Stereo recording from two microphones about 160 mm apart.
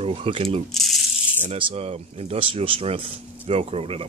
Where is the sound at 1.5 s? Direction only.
35° right (ahead or behind).